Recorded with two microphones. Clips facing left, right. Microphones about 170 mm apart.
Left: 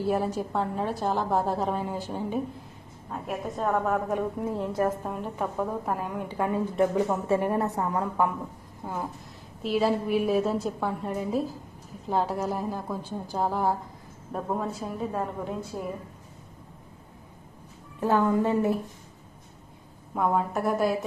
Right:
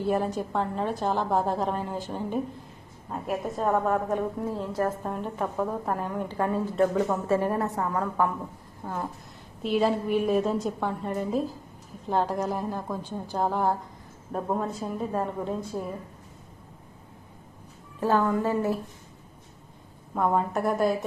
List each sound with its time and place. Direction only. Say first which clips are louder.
0.0 s a woman's voice: even; centre (ahead or behind)
4.4 s a woman's voice: left 1 dB; 20° left (ahead or behind)
5.0 s a woman's voice: right 1 dB; centre (ahead or behind); by 8.3 s 20° left (ahead or behind)
8.8 s a woman's voice: even; 5° left (ahead or behind)
18.0 s a woman's voice: left 1 dB; 15° left (ahead or behind)
20.1 s a woman's voice: right 1 dB; centre (ahead or behind)